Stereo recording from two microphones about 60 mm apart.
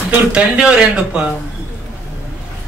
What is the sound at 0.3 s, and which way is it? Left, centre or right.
Speech, centre.